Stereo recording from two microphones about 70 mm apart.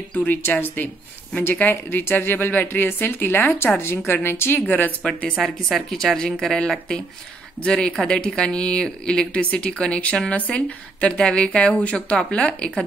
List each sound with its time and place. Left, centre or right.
0.1 s speech: left
5.4 s speech: centre